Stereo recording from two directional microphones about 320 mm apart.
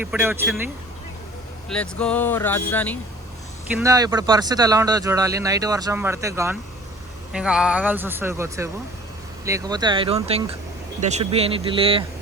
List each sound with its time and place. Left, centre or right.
0.0 s speech: centre
1.7 s speech: centre
3.7 s speech: centre